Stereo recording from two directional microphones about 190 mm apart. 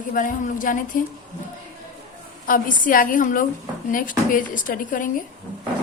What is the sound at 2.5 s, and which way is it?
A woman's voice, 45° left (ahead or behind).